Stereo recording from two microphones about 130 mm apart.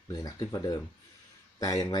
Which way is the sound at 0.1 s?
30° left (ahead or behind).